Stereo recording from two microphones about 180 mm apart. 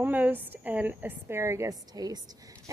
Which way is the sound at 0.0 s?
10° right (ahead or behind).